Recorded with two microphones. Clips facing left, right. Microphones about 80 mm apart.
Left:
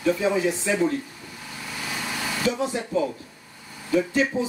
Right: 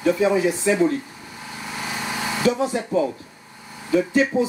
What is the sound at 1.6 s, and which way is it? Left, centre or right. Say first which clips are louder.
Vehicle: right 3 dB; right.